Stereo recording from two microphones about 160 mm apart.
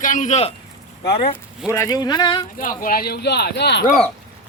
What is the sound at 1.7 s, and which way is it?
Speech, 20° left (ahead or behind).